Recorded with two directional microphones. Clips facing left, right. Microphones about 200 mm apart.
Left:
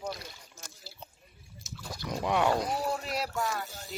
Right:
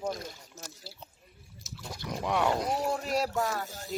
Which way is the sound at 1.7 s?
Centre (ahead or behind).